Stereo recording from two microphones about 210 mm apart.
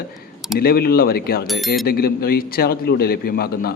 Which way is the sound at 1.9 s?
45° left (ahead or behind).